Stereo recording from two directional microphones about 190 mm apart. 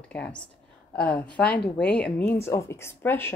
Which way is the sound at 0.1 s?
5° left (ahead or behind).